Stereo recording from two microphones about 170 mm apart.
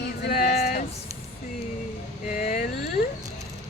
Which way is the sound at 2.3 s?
50° left (ahead or behind).